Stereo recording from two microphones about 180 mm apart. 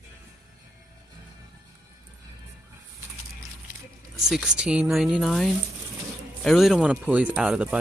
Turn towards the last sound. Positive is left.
turn(degrees=-5)  # may be behind; listen again after turning